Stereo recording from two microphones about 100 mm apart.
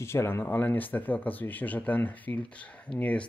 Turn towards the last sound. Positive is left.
turn(degrees=15)  # may be behind; listen again after turning